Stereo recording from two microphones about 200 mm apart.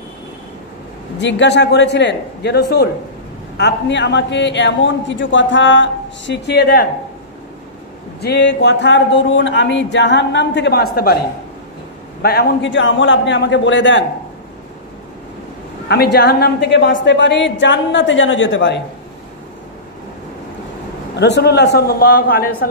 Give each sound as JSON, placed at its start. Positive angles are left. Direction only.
{"t": 1.1, "sound": "speech", "side_deg": 60}
{"t": 8.2, "sound": "speech", "side_deg": 55}
{"t": 12.2, "sound": "speech", "side_deg": 50}
{"t": 15.9, "sound": "speech", "side_deg": 55}
{"t": 21.2, "sound": "a man's voice", "side_deg": 55}